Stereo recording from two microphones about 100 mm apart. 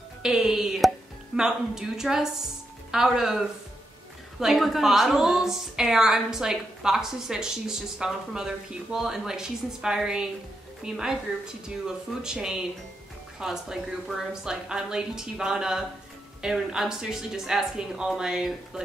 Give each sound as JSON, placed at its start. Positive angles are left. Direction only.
{"t": 0.2, "sound": "a woman's voice", "side_deg": -5}